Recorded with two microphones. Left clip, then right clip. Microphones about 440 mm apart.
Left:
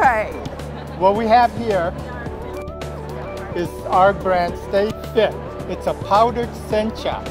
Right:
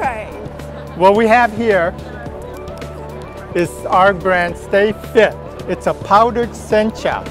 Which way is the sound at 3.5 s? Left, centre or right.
Right.